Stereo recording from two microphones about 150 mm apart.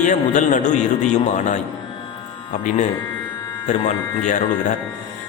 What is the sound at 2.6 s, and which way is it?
Speech, 55° left (ahead or behind).